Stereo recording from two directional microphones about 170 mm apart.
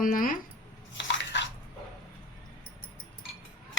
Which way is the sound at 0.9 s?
90° left.